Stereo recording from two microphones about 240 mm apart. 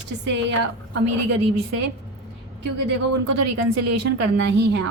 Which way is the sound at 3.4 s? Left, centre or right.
Right.